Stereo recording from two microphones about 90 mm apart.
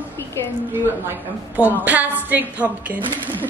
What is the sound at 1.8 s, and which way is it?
Speech, 20° right (ahead or behind).